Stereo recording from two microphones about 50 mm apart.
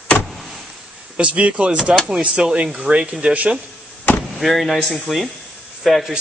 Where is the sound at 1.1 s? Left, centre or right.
Right.